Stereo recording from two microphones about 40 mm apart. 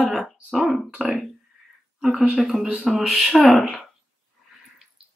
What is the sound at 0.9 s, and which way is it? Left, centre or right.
Speech, right.